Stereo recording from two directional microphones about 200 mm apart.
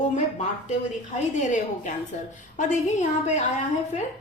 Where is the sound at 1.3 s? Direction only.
35° left (ahead or behind).